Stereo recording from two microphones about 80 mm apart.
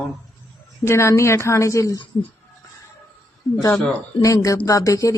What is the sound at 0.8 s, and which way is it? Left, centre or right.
A woman's voice, left.